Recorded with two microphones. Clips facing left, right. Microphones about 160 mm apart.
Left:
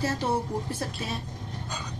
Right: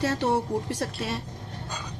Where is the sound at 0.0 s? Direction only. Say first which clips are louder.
Right 3 dB; 70° right (ahead or behind).